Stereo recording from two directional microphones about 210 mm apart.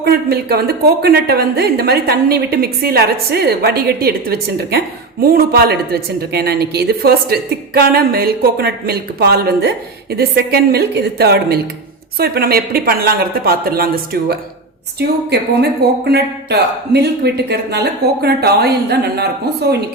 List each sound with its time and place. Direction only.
0.0 s a woman's voice: 50° right (ahead or behind)
16.0 s a woman's voice: 50° right (ahead or behind)